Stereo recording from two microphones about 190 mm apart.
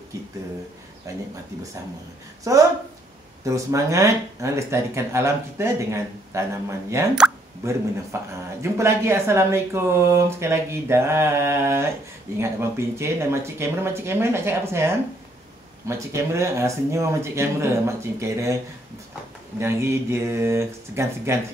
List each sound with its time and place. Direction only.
1.0 s speech: 15° right (ahead or behind)
3.4 s speech: 15° right (ahead or behind)
19.6 s speech: 15° right (ahead or behind)